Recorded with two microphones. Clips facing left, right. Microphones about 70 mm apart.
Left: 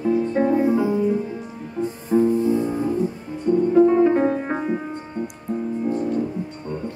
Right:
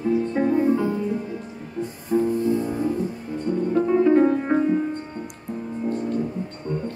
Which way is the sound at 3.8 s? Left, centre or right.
Left.